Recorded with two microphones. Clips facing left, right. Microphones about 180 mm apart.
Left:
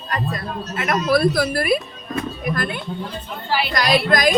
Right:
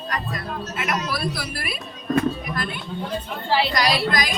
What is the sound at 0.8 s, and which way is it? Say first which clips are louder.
Speech: left 10 dB; 50° left (ahead or behind).